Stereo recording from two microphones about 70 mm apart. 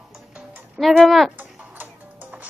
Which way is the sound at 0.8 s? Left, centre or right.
Centre.